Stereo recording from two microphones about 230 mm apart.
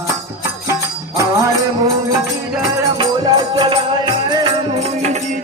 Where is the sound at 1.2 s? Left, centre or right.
Centre.